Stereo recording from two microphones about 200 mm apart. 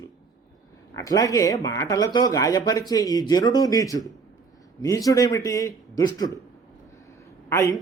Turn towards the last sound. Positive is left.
turn(degrees=15)  # may be behind; listen again after turning